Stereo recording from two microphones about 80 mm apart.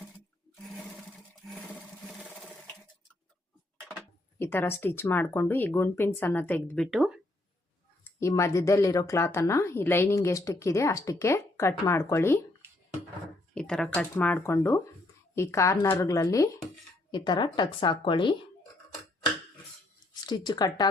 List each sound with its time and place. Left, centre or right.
1.5 s roar: centre
1.8 s a sound: centre
4.4 s speech: left
6.9 s speech: centre
8.2 s speech: left
10.2 s speech: left
13.5 s speech: centre
14.0 s speech: centre
14.4 s speech: left
17.1 s a woman's voice: left
20.2 s speech: left